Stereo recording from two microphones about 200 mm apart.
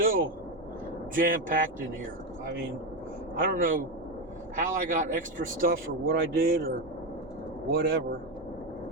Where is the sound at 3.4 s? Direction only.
45° right (ahead or behind).